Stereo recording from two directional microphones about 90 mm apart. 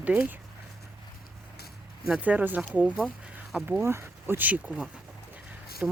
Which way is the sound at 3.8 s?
30° right (ahead or behind).